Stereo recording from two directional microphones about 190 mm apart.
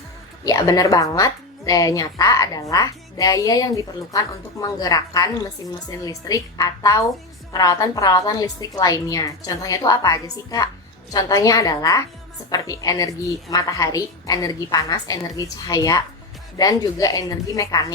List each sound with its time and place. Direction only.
0.4 s a woman's voice: 20° left (ahead or behind)